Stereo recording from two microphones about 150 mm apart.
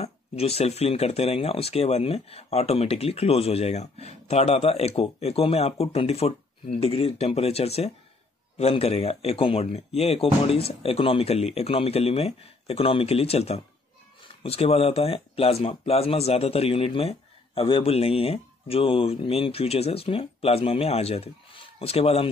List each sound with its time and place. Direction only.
0.0 s speech: 40° left (ahead or behind)